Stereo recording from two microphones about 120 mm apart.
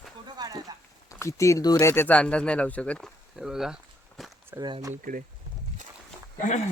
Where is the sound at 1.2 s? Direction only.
25° left (ahead or behind).